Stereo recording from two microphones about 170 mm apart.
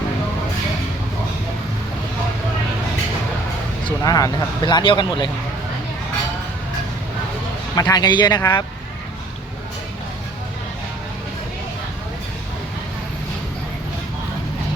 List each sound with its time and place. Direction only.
3.8 s speech: 20° left (ahead or behind)
7.8 s speech: 20° left (ahead or behind)